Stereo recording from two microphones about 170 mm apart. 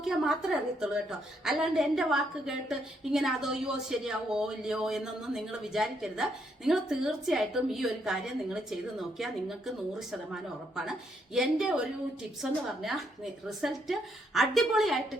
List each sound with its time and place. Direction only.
0.0 s a woman's voice: 5° right (ahead or behind)
11.3 s a woman's voice: 5° right (ahead or behind)